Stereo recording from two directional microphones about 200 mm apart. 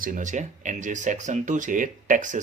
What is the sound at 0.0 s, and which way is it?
Speech, 40° right (ahead or behind).